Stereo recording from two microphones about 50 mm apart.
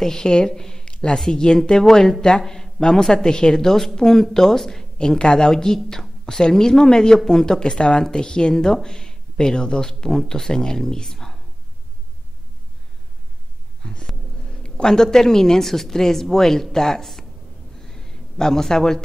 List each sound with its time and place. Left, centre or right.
0.0 s a woman's voice: centre
13.8 s speech: centre
17.7 s a sound: centre